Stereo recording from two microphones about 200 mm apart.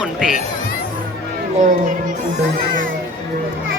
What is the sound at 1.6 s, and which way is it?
Speech, 40° right (ahead or behind).